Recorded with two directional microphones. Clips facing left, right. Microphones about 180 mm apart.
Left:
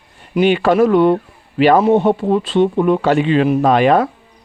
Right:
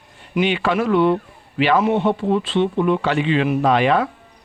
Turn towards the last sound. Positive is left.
turn(degrees=45)  # may be behind; listen again after turning